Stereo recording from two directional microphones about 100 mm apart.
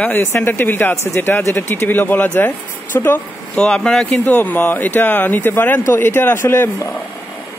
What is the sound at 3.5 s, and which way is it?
A man's voice, 10° left (ahead or behind).